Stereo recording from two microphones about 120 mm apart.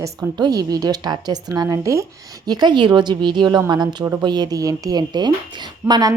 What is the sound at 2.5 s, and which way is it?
A woman's voice, 35° right (ahead or behind).